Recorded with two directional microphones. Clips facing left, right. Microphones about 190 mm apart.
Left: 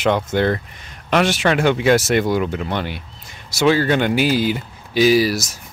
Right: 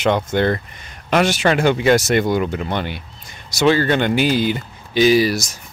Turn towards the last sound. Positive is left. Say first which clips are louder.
# even
turn(degrees=5)  # may be behind; listen again after turning